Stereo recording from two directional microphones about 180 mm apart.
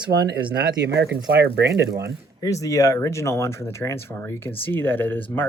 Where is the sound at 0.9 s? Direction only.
65° right (ahead or behind).